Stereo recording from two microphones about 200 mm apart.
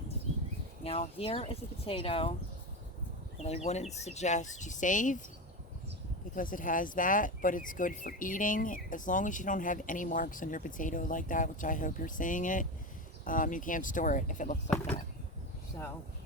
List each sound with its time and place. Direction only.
0.9 s speech: 30° left (ahead or behind)
3.4 s speech: 35° left (ahead or behind)
6.3 s speech: 40° left (ahead or behind)